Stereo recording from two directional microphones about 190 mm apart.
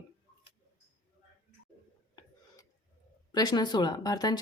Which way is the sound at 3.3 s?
20° left (ahead or behind).